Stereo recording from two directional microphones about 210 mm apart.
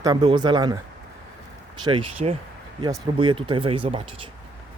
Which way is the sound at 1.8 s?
25° right (ahead or behind).